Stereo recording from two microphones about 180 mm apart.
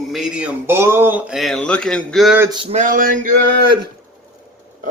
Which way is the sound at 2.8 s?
50° right (ahead or behind).